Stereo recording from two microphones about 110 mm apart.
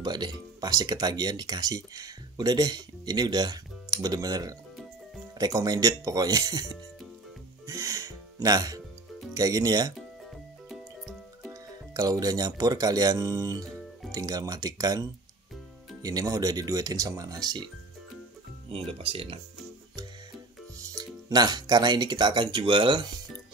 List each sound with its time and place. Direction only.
0.0 s speech: 40° right (ahead or behind)
7.6 s music: 30° right (ahead or behind)
9.3 s speech: 35° right (ahead or behind)
10.7 s music: centre (ahead or behind)
11.9 s speech: 35° right (ahead or behind)
18.7 s speech: 60° right (ahead or behind)
20.8 s speech: 35° right (ahead or behind)